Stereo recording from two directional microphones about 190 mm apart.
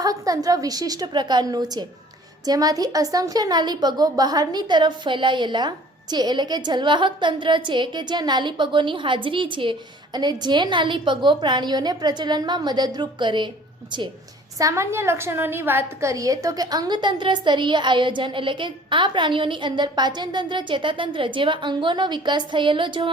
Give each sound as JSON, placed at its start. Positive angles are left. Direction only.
{"t": 0.0, "sound": "a woman's voice", "side_deg": -20}
{"t": 14.6, "sound": "a woman's voice", "side_deg": -15}